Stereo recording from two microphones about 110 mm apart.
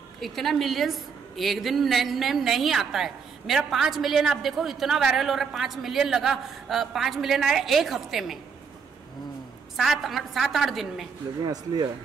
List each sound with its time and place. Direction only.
0.2 s a woman's voice: centre (ahead or behind)
9.8 s a woman's voice: centre (ahead or behind)
11.4 s speech: 35° right (ahead or behind)